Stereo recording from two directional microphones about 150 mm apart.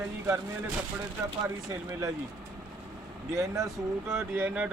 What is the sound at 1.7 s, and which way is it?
Speech, 25° right (ahead or behind).